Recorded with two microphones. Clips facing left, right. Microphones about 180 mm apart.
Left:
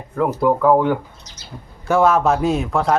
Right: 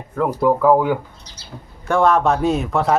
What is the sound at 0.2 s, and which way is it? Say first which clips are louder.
Speech: even; centre (ahead or behind).